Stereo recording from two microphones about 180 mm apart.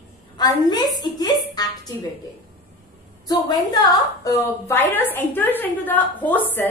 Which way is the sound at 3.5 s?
20° left (ahead or behind).